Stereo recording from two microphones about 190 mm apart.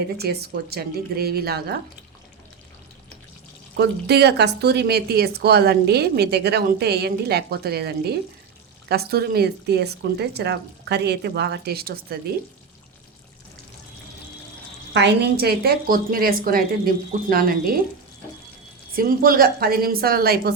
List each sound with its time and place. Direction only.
0.2 s speech: 55° right (ahead or behind)
3.8 s speech: 60° right (ahead or behind)
14.9 s a woman's voice: 60° right (ahead or behind)
18.9 s a woman's voice: 50° right (ahead or behind)